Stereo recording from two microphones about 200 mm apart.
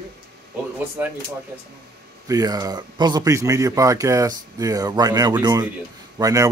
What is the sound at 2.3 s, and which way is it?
Speech, 20° right (ahead or behind).